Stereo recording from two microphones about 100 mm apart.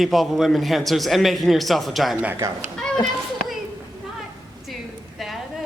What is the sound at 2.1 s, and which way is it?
Speech, 15° right (ahead or behind).